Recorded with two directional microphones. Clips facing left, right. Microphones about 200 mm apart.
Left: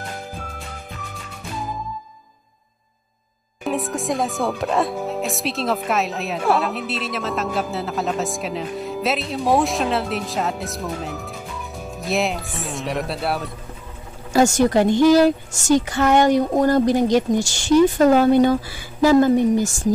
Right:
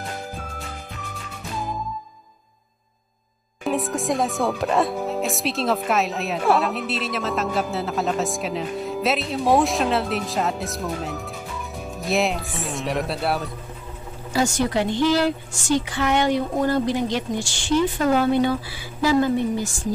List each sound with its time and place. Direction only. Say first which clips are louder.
0.3 s music: even; centre (ahead or behind)
3.6 s speech: even; centre (ahead or behind)
14.3 s a woman's voice: left 6 dB; 45° left (ahead or behind)